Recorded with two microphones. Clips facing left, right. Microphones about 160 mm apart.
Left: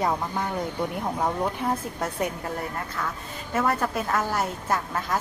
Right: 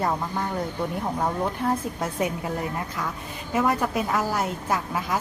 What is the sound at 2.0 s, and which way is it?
Speech, 10° right (ahead or behind).